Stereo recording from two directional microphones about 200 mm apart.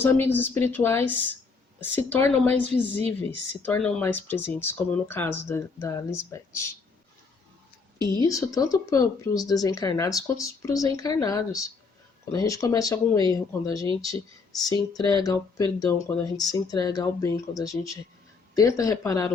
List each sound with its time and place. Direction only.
0.0 s speech: 10° left (ahead or behind)
8.3 s speech: 15° left (ahead or behind)